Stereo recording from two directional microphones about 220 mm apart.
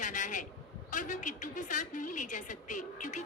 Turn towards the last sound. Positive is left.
turn(degrees=35)  # may be behind; listen again after turning